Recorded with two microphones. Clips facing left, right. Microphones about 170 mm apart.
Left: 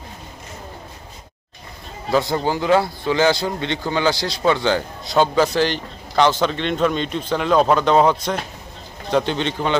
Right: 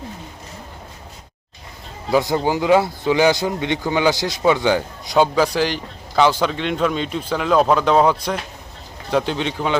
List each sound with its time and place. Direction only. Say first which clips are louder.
2.0 s speech: right 1 dB; 15° right (ahead or behind)